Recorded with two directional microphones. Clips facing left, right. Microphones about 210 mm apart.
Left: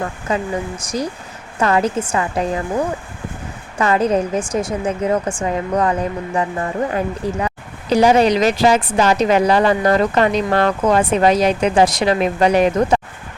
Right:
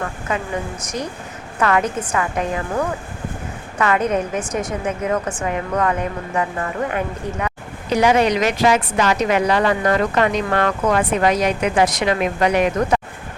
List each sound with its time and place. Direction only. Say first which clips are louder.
0.3 s a woman's voice: left 4 dB; 35° left (ahead or behind)
1.5 s a woman's voice: left 2 dB; 30° left (ahead or behind)